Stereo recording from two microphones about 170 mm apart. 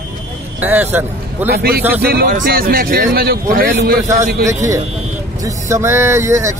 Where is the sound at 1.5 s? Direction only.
65° right (ahead or behind).